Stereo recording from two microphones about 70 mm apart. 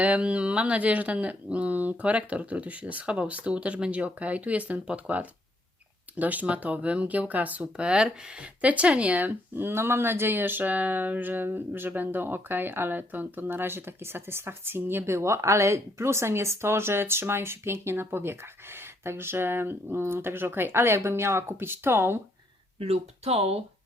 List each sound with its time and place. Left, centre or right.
0.0 s speech: centre